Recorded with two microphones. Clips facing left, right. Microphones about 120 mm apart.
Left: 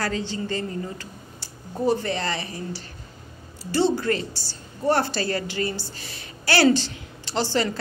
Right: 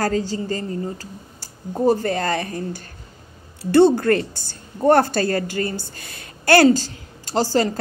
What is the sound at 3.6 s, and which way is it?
Speech, 60° right (ahead or behind).